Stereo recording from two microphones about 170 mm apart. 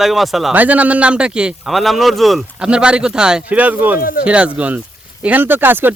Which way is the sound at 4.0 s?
55° left (ahead or behind).